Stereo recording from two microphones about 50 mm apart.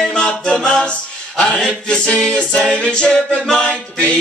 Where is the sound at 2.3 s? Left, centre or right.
Left.